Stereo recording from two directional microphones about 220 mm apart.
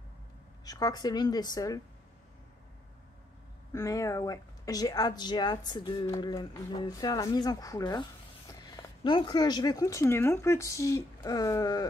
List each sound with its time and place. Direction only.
0.7 s speech: 15° left (ahead or behind)
3.7 s speech: 15° left (ahead or behind)